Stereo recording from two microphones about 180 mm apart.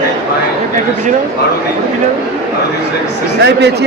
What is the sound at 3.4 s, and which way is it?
Speech, 70° right (ahead or behind).